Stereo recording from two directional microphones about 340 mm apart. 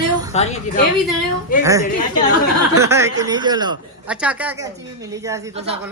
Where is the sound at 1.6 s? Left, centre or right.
Centre.